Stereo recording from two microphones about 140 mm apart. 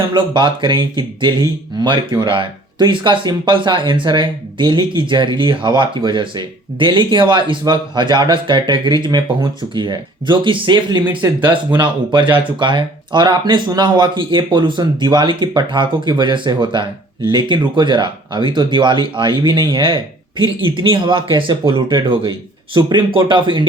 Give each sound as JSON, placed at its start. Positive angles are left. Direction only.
{"t": 0.1, "sound": "speech", "side_deg": -35}
{"t": 11.3, "sound": "speech", "side_deg": -15}
{"t": 11.8, "sound": "speech", "side_deg": -35}